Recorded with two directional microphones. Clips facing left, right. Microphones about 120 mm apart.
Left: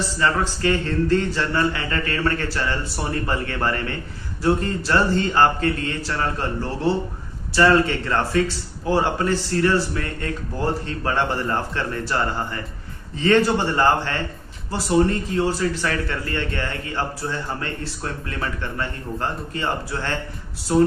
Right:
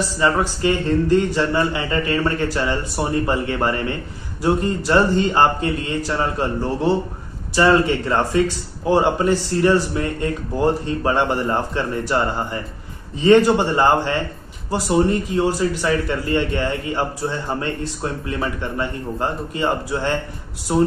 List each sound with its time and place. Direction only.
0.2 s a man's voice: 20° right (ahead or behind)